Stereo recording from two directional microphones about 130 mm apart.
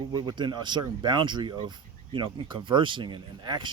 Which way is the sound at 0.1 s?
35° right (ahead or behind).